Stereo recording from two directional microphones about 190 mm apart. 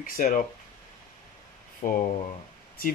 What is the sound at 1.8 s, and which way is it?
Speech, 45° left (ahead or behind).